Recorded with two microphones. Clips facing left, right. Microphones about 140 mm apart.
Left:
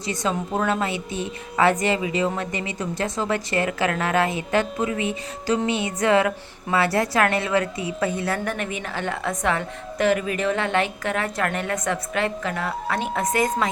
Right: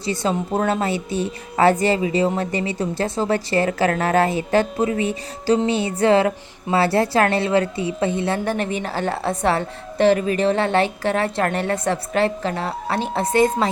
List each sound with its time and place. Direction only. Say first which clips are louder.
0.0 s a woman's voice: right 3 dB; 30° right (ahead or behind)